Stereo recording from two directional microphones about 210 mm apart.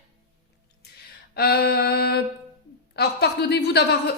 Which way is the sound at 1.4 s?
50° left (ahead or behind).